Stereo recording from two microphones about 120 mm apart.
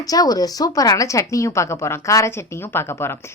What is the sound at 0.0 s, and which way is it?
A woman's voice, 30° left (ahead or behind).